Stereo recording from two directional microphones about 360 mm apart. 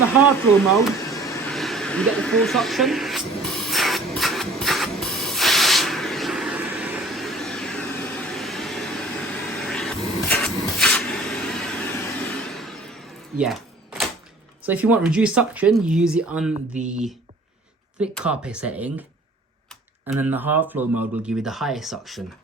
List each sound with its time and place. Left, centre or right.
0.8 s a sound: centre
9.6 s printer: centre
14.6 s speech: centre
16.6 s speech: centre
16.9 s speech: centre
20.1 s speech: centre